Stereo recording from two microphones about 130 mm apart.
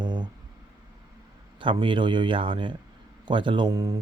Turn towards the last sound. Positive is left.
turn(degrees=-30)  # may be behind; listen again after turning